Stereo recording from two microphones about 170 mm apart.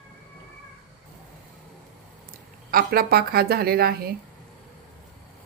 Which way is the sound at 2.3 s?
55° right (ahead or behind).